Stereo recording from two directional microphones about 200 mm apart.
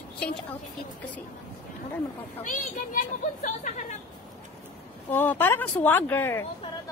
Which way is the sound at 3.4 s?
35° left (ahead or behind).